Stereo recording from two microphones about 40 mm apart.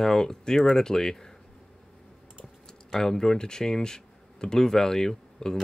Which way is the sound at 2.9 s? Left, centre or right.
Centre.